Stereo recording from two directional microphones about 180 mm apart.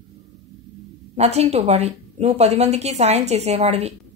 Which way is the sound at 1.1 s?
35° right (ahead or behind).